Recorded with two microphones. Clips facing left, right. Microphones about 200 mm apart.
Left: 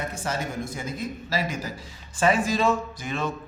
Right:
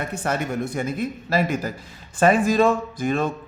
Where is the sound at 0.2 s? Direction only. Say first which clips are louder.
Right 8 dB; 60° right (ahead or behind).